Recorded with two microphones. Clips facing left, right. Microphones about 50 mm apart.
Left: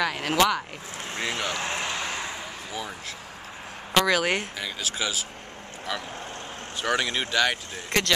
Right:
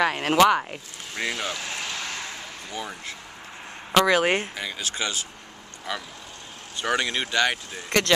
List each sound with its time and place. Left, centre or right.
0.0 s speech: right
1.3 s a sound: centre
3.9 s speech: centre
4.6 s speech: centre